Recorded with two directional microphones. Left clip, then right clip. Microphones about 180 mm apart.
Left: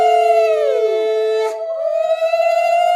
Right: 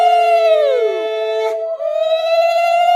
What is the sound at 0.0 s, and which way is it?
Howl, 10° right (ahead or behind).